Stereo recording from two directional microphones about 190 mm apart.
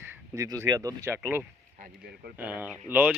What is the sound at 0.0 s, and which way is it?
A man's voice, 15° right (ahead or behind).